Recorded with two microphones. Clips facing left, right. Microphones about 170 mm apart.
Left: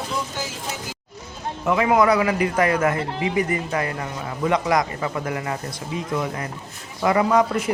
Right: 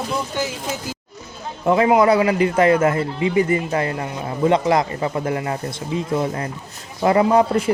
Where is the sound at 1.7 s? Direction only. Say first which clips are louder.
Right 3 dB; 25° right (ahead or behind).